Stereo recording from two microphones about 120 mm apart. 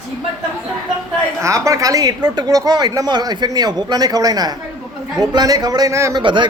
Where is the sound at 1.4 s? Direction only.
25° right (ahead or behind).